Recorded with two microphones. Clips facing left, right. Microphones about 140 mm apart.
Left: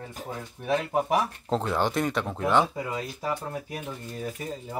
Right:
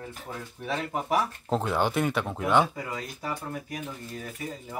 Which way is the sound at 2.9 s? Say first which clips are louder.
Left 4 dB; 25° left (ahead or behind).